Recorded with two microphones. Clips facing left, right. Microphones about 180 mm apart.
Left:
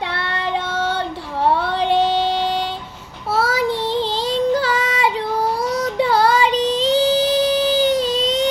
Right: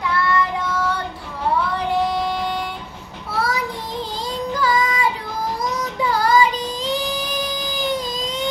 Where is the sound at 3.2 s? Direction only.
85° left.